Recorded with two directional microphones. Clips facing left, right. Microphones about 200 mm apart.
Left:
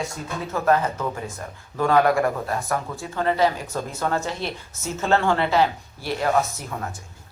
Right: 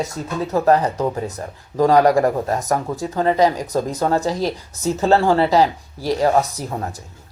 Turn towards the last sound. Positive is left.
turn(degrees=-35)  # may be behind; listen again after turning